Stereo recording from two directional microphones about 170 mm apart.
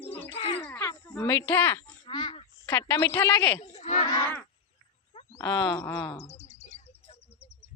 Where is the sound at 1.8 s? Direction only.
25° left (ahead or behind).